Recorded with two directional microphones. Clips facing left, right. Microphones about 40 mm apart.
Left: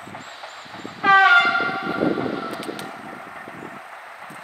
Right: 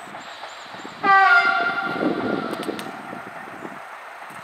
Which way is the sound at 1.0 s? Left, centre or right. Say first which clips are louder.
Left 1 dB; left.